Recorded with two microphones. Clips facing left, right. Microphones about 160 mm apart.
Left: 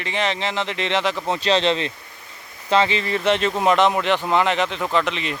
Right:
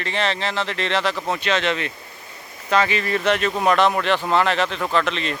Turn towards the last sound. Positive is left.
turn(degrees=15)  # may be behind; listen again after turning